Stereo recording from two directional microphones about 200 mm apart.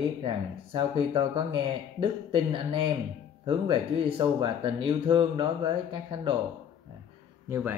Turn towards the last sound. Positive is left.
turn(degrees=-10)  # may be behind; listen again after turning